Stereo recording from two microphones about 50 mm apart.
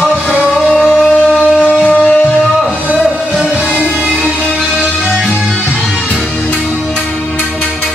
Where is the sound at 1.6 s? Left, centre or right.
Left.